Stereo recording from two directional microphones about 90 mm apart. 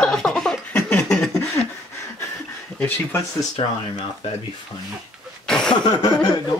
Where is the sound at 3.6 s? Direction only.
90° left.